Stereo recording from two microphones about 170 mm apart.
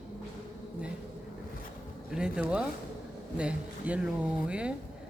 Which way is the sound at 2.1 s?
5° right (ahead or behind).